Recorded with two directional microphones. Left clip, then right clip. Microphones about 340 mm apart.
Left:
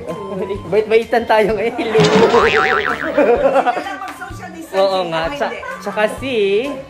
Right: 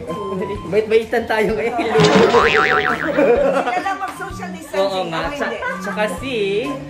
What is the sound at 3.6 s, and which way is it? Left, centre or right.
Speech, centre.